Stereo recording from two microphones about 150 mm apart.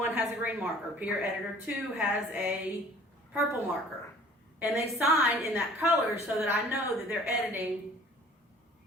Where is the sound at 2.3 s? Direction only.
10° right (ahead or behind).